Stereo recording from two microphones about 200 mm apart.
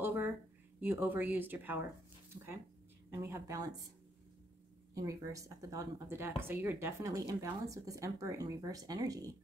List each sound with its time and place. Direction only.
0.0 s a sound: 10° right (ahead or behind)
0.7 s speech: 10° right (ahead or behind)
3.1 s speech: 15° right (ahead or behind)
4.9 s speech: 15° right (ahead or behind)